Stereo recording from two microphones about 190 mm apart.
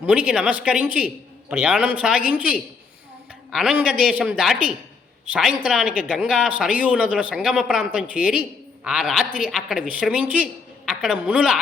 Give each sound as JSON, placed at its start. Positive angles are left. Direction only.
{"t": 0.0, "sound": "a man's voice", "side_deg": -5}